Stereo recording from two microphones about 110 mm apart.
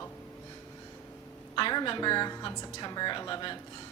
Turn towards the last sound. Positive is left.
turn(degrees=40)  # may be behind; listen again after turning